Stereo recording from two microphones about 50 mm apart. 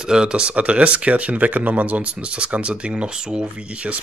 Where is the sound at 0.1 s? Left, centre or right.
Centre.